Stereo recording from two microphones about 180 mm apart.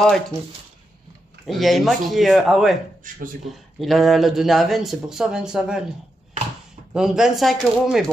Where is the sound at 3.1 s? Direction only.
45° right (ahead or behind).